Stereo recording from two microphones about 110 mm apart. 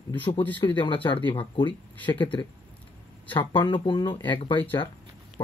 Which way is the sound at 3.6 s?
45° left (ahead or behind).